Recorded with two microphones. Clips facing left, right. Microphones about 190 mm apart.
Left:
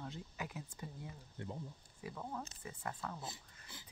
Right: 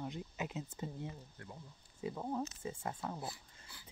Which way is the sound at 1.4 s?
20° left (ahead or behind).